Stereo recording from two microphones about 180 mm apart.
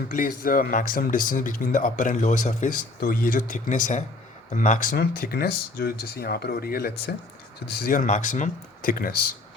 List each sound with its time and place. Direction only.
0.1 s speech: 50° left (ahead or behind)